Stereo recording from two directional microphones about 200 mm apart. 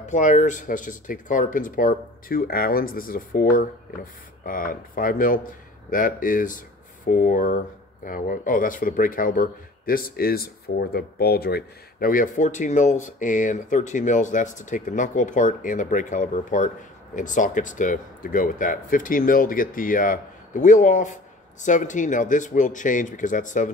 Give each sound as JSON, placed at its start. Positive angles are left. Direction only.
{"t": 0.0, "sound": "speech", "side_deg": 35}